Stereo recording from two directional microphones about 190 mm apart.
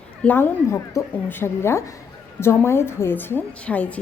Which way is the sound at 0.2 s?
10° left (ahead or behind).